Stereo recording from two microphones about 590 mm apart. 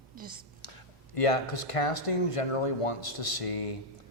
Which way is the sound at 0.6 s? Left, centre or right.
Left.